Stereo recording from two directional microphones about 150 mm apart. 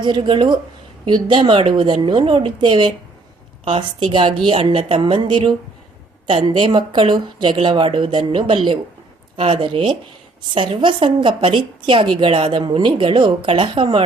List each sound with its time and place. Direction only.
0.0 s a woman's voice: 35° right (ahead or behind)